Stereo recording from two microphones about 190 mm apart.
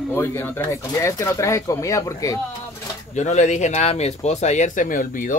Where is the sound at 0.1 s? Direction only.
10° left (ahead or behind).